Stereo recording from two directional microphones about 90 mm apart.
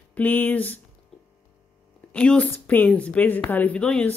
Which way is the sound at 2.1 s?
15° left (ahead or behind).